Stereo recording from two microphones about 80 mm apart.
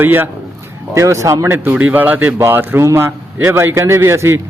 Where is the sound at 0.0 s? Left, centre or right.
Right.